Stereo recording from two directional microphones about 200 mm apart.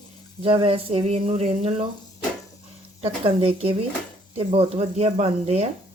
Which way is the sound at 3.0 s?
30° right (ahead or behind).